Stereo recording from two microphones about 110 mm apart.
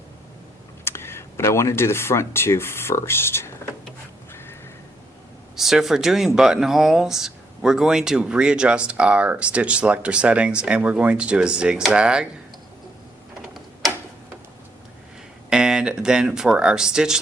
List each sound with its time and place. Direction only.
0.9 s speech: 20° left (ahead or behind)
4.3 s a sound: 20° left (ahead or behind)
5.5 s speech: 5° right (ahead or behind)
15.4 s speech: 5° right (ahead or behind)